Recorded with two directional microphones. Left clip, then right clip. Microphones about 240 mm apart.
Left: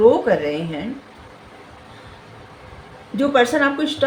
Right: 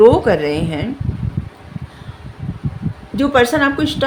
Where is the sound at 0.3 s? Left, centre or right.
Right.